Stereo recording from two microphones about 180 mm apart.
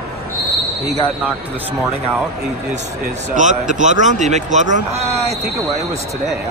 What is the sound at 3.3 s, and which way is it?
A man's voice, 45° right (ahead or behind).